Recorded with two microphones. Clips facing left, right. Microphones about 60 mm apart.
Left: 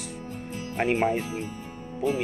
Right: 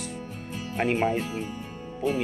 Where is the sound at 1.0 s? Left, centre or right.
Centre.